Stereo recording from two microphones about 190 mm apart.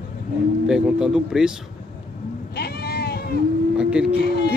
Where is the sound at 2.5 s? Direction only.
55° left (ahead or behind).